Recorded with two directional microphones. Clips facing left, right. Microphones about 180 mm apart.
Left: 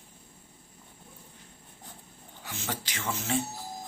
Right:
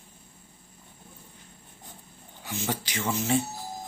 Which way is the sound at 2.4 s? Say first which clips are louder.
Right 5 dB; 15° right (ahead or behind).